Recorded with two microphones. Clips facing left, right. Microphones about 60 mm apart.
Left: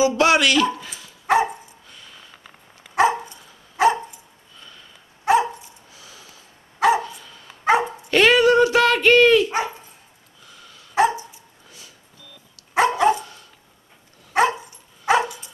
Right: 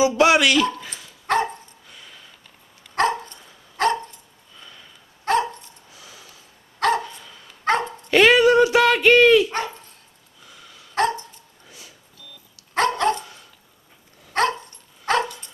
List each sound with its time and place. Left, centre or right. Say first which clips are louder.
0.2 s speech: right 3 dB; centre
0.7 s dog: left 1 dB; centre
2.9 s dog: left 3 dB; centre
5.2 s dog: left 3 dB; centre
6.8 s dog: left 3 dB; centre
8.1 s dog: right 1 dB; right
8.6 s a sound: even; right
9.5 s dog: left 3 dB; centre
11.0 s dog: left 3 dB; centre
12.7 s dog: left 3 dB; centre
14.3 s dog: left 3 dB; centre